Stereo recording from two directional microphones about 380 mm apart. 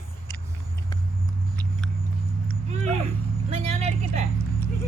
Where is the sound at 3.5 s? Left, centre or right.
Centre.